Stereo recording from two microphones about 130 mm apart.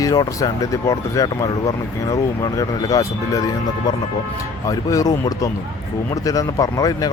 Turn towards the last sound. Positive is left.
turn(degrees=30)  # may be behind; listen again after turning